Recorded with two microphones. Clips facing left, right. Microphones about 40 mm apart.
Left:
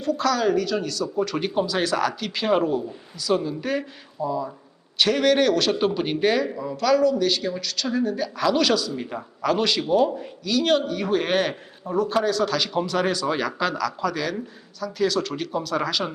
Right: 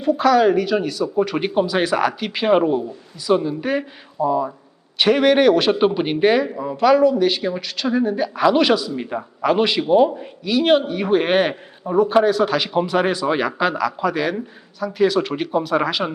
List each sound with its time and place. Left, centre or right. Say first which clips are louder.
0.0 s a man's voice: right 7 dB; right